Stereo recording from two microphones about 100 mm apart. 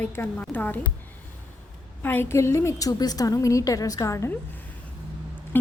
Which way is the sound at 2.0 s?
20° left (ahead or behind).